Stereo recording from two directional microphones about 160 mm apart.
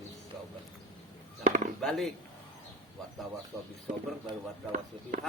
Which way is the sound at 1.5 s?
50° right (ahead or behind).